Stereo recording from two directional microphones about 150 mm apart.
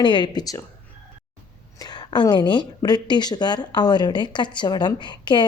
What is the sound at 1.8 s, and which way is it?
A woman's voice, 30° left (ahead or behind).